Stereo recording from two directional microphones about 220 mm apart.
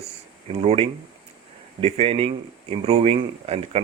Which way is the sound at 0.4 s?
25° right (ahead or behind).